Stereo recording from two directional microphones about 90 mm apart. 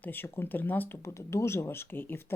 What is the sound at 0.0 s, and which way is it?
Speech, 20° left (ahead or behind).